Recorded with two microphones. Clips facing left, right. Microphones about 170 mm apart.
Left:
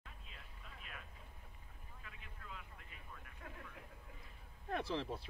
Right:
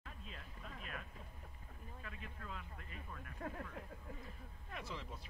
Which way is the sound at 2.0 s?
45° right (ahead or behind).